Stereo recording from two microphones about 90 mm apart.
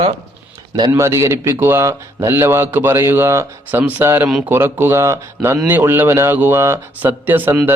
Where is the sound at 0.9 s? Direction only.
30° right (ahead or behind).